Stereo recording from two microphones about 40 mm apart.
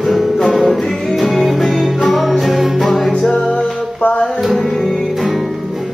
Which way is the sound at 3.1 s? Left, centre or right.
Left.